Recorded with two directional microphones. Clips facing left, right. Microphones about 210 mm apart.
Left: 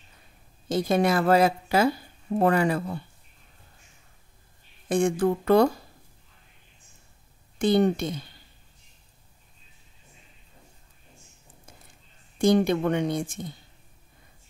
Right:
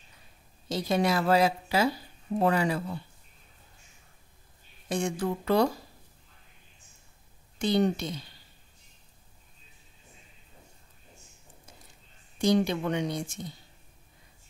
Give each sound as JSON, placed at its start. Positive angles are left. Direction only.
{"t": 0.7, "sound": "a woman's voice", "side_deg": 50}
{"t": 4.8, "sound": "a woman's voice", "side_deg": 50}
{"t": 7.5, "sound": "a woman's voice", "side_deg": 55}
{"t": 12.4, "sound": "a woman's voice", "side_deg": 50}